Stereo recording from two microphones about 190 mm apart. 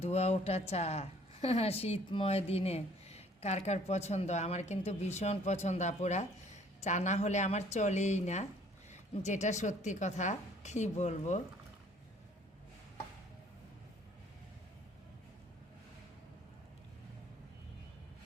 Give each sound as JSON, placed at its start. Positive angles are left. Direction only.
{"t": 0.0, "sound": "speech", "side_deg": 35}